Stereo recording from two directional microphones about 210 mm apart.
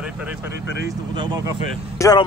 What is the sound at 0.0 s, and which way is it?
Vehicle, 5° right (ahead or behind).